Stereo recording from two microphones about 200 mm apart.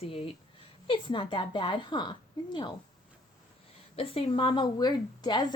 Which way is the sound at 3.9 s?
30° left (ahead or behind).